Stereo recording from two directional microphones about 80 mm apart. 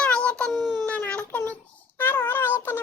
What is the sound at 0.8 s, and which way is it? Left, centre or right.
Baby cry, centre.